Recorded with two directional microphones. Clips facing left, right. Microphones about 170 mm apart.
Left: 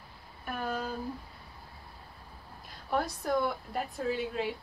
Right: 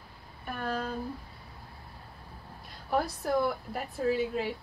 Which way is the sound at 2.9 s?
Centre (ahead or behind).